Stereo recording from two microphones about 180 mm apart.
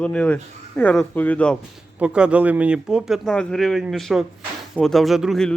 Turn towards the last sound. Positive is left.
turn(degrees=0)  # may be behind; listen again after turning